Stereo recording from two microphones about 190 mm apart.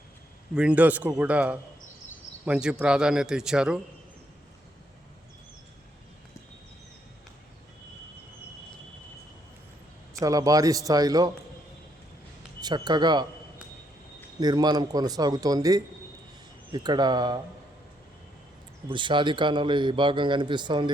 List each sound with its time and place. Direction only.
0.5 s a man's voice: 5° right (ahead or behind)
10.2 s a man's voice: 20° right (ahead or behind)
12.5 s speech: 20° right (ahead or behind)
14.3 s a man's voice: 20° right (ahead or behind)
18.9 s a man's voice: 25° right (ahead or behind)